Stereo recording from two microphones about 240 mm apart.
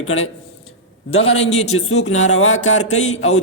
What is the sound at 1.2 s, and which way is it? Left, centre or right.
Speech, left.